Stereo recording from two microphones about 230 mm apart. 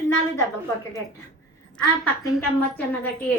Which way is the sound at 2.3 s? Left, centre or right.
Centre.